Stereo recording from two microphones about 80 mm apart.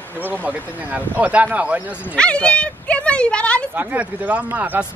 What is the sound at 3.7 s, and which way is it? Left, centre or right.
Speech, centre.